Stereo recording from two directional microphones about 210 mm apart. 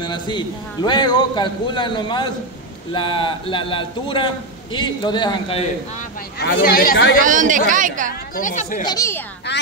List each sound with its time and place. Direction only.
0.0 s a man's voice: 20° left (ahead or behind)
6.4 s speech: 45° left (ahead or behind)
7.2 s a woman's voice: 40° right (ahead or behind)
8.4 s speech: 40° left (ahead or behind)
8.8 s a child's voice: 15° left (ahead or behind)